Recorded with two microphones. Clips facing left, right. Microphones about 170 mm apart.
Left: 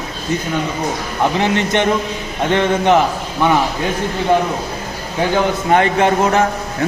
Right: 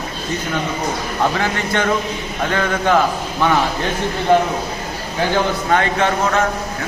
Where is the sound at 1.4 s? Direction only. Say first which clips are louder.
Left 4 dB; 20° left (ahead or behind).